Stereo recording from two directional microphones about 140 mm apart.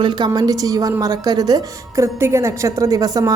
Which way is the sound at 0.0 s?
30° right (ahead or behind).